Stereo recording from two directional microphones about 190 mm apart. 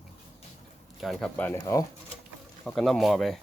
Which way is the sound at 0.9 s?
Centre (ahead or behind).